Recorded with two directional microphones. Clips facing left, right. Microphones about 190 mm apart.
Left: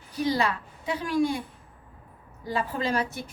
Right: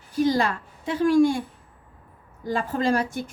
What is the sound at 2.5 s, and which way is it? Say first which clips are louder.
Speech: right 4 dB; 45° right (ahead or behind).